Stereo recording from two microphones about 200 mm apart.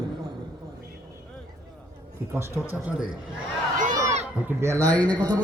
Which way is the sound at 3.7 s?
40° right (ahead or behind).